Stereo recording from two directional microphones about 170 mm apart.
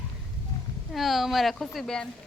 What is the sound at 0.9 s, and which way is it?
Speech, centre (ahead or behind).